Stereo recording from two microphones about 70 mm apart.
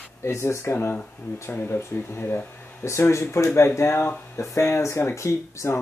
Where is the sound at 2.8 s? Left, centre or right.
Left.